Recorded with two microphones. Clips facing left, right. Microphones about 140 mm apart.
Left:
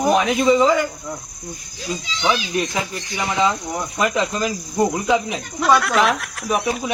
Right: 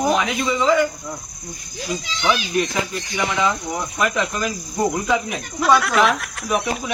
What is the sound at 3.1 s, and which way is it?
Cricket, 20° left (ahead or behind).